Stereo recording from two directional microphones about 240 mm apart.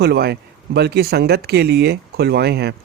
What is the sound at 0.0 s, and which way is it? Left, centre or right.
Speech, right.